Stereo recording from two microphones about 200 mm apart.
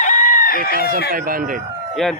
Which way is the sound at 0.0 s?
40° left (ahead or behind).